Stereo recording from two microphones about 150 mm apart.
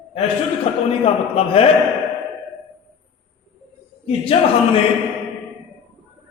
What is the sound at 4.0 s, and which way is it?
Speech, 40° left (ahead or behind).